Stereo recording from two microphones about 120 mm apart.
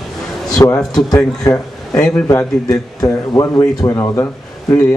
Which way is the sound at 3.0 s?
30° left (ahead or behind).